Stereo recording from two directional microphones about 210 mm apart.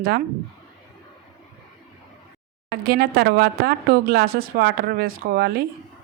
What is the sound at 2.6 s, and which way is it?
A woman's voice, 50° right (ahead or behind).